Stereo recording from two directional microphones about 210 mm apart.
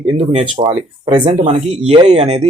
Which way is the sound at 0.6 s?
20° right (ahead or behind).